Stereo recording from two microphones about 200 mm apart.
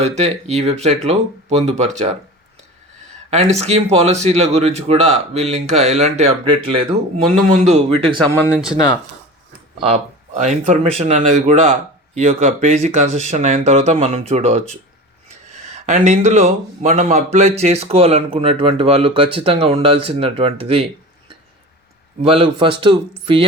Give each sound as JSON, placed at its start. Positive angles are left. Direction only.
{"t": 0.0, "sound": "speech", "side_deg": -35}
{"t": 3.2, "sound": "speech", "side_deg": -30}
{"t": 7.3, "sound": "speech", "side_deg": -40}
{"t": 8.5, "sound": "speech", "side_deg": -5}
{"t": 9.8, "sound": "speech", "side_deg": -35}
{"t": 15.7, "sound": "speech", "side_deg": -35}
{"t": 22.2, "sound": "speech", "side_deg": -30}